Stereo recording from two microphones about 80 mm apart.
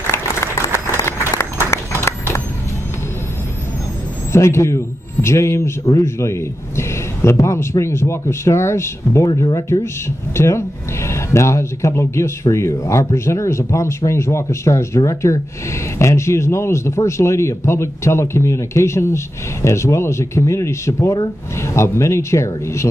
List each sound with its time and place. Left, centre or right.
0.0 s applause: left
4.3 s speech: left
9.2 s speech: left
9.7 s speech: left